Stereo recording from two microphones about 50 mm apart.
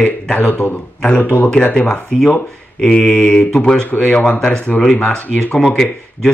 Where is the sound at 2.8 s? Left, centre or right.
Centre.